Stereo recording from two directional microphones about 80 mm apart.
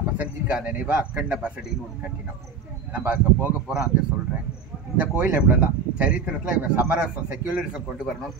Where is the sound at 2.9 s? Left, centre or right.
Right.